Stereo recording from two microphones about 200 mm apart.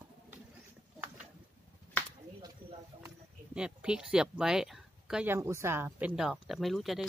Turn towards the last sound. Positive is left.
turn(degrees=0)  # may be behind; listen again after turning